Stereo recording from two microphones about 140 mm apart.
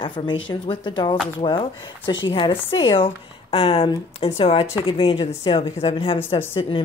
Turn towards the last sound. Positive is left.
turn(degrees=40)  # may be behind; listen again after turning